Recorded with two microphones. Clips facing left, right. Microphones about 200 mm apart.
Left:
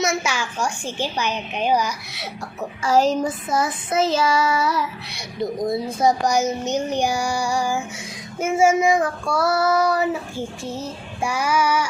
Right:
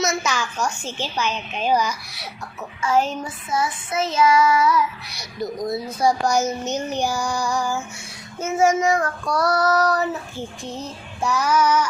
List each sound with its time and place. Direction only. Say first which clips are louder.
0.0 s child singing: even; 10° left (ahead or behind)
2.6 s child singing: left 2 dB; 35° left (ahead or behind)
6.0 s child singing: even; 20° left (ahead or behind)